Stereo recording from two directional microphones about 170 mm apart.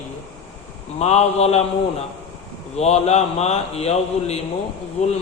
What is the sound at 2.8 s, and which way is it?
Mantra, 40° left (ahead or behind).